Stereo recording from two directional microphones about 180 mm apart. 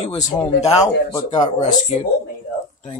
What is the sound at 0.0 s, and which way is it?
Speech, 35° left (ahead or behind).